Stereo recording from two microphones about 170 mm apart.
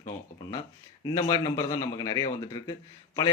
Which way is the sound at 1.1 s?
25° left (ahead or behind).